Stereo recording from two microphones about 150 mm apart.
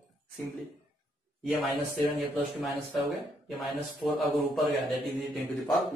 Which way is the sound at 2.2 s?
Centre (ahead or behind).